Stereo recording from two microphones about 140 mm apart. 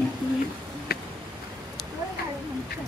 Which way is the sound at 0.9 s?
90° left.